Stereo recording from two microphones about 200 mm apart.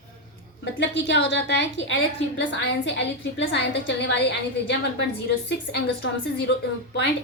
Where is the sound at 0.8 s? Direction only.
60° left (ahead or behind).